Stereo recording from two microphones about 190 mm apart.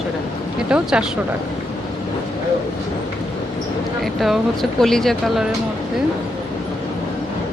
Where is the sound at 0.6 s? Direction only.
5° right (ahead or behind).